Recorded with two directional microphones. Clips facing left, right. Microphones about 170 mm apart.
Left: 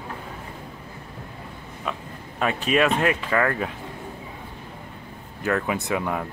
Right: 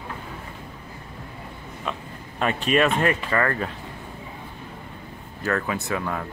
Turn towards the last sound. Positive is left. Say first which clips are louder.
# left 2 dB
turn(degrees=15)  # may be behind; listen again after turning